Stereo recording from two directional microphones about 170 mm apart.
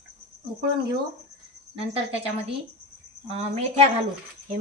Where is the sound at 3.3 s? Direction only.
40° right (ahead or behind).